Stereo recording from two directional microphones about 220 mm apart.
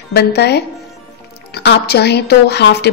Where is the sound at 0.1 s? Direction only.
50° left (ahead or behind).